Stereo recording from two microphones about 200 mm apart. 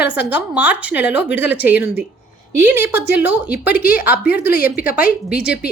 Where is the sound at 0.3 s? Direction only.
10° right (ahead or behind).